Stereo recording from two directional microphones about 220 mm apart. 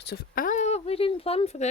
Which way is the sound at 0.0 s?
45° left (ahead or behind).